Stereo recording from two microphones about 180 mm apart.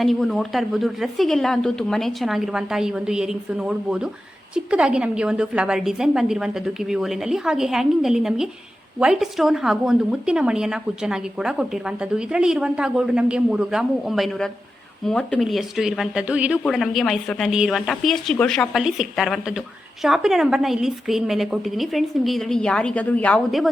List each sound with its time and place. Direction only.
0.0 s speech: centre (ahead or behind)